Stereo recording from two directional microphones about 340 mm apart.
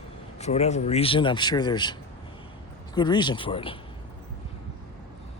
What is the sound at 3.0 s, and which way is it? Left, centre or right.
Speech, centre.